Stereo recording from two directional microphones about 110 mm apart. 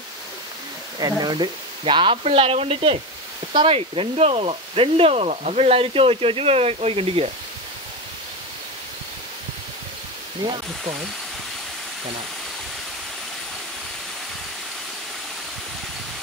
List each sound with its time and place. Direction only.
0.9 s speech: 40° right (ahead or behind)
2.2 s speech: 65° right (ahead or behind)
10.4 s speech: 45° right (ahead or behind)